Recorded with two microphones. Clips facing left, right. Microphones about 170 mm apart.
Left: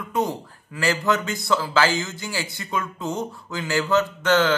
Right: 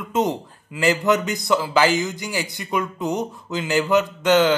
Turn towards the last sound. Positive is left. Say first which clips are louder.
# right 3 dB
turn(degrees=-15)  # may be behind; listen again after turning